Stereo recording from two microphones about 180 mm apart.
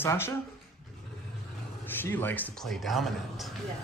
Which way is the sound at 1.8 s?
10° left (ahead or behind).